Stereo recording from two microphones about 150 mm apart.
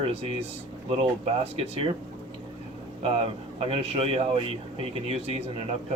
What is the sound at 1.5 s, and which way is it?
Speech, 40° right (ahead or behind).